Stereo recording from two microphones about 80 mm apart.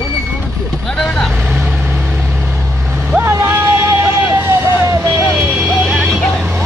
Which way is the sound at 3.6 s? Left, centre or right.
Right.